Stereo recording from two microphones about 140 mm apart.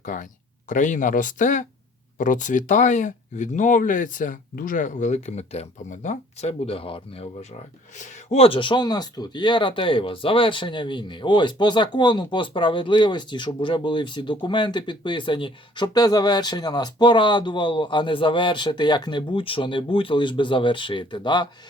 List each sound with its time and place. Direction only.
0.0 s speech: 65° left (ahead or behind); by 7.3 s 40° left (ahead or behind)
7.9 s speech: 55° left (ahead or behind); by 21.4 s 35° left (ahead or behind)